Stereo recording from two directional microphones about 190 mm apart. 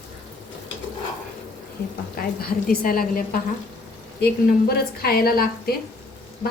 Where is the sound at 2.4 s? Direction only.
50° left (ahead or behind).